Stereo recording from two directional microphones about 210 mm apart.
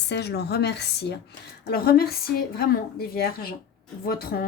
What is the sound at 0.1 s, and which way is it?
A woman's voice, 50° left (ahead or behind).